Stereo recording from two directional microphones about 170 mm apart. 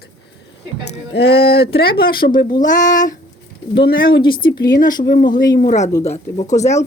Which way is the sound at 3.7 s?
75° left (ahead or behind).